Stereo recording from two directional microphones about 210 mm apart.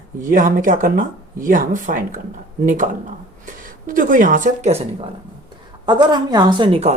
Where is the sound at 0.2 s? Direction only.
40° right (ahead or behind).